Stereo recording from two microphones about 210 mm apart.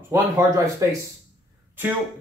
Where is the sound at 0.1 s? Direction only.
15° right (ahead or behind).